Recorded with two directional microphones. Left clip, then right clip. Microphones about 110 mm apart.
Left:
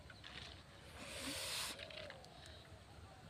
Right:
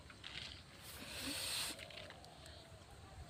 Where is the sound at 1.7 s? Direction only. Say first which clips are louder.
Left 1 dB; 25° right (ahead or behind).